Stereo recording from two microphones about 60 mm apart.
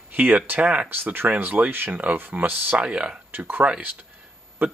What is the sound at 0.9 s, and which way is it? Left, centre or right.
Speech, right.